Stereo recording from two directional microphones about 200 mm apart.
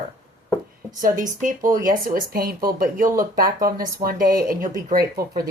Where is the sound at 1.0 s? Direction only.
40° right (ahead or behind).